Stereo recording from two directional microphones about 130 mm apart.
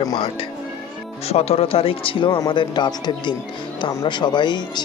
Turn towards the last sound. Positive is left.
turn(degrees=35)  # may be behind; listen again after turning